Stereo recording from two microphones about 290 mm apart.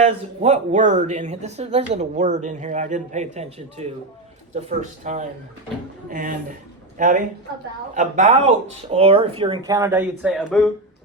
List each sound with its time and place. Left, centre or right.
0.0 s a man's voice: right; by 10.7 s centre